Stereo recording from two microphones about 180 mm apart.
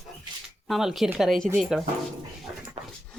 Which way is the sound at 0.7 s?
Centre (ahead or behind).